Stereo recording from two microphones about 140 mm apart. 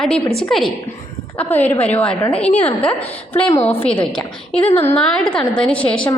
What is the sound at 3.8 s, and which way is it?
A woman's voice, 40° left (ahead or behind).